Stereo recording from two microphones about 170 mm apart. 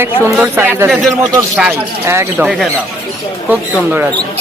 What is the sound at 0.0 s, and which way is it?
Speech, 15° right (ahead or behind).